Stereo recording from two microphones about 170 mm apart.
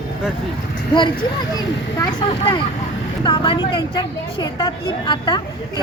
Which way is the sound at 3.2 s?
30° left (ahead or behind).